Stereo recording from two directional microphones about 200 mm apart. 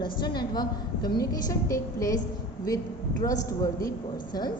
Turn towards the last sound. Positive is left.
turn(degrees=15)  # may be behind; listen again after turning